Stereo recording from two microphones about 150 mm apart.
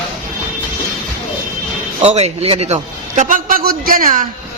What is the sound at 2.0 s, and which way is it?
A man's voice, 45° right (ahead or behind).